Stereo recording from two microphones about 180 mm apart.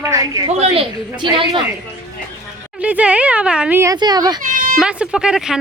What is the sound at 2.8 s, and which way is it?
A woman's voice, 5° right (ahead or behind).